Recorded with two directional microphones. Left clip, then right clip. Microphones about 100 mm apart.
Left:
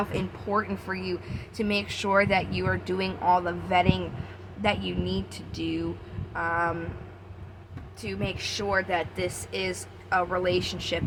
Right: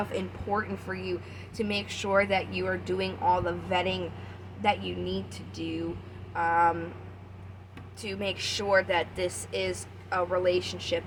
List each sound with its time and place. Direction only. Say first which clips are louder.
0.1 s a woman's voice: left 2 dB; 35° left (ahead or behind)
6.3 s a sound: right 3 dB; 30° left (ahead or behind)
8.0 s a woman's voice: even; 25° left (ahead or behind); by 11.0 s 40° left (ahead or behind)